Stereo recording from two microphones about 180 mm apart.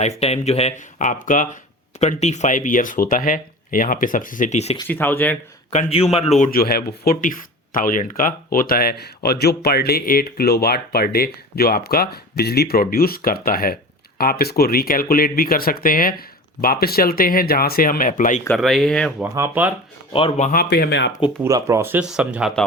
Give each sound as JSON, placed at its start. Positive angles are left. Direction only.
{"t": 0.0, "sound": "speech", "side_deg": 35}
{"t": 4.9, "sound": "speech", "side_deg": 10}
{"t": 5.7, "sound": "speech", "side_deg": 35}
{"t": 6.5, "sound": "speech", "side_deg": 55}
{"t": 18.4, "sound": "speech", "side_deg": 0}
{"t": 19.2, "sound": "speech", "side_deg": -10}
{"t": 20.1, "sound": "speech", "side_deg": 35}
{"t": 20.6, "sound": "speech", "side_deg": 60}
{"t": 21.4, "sound": "speech", "side_deg": -15}